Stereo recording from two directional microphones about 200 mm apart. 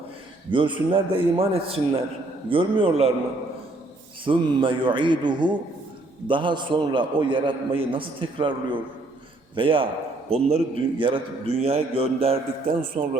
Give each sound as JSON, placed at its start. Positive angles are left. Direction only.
{"t": 0.5, "sound": "a man's voice", "side_deg": -25}
{"t": 4.3, "sound": "a man's voice", "side_deg": -25}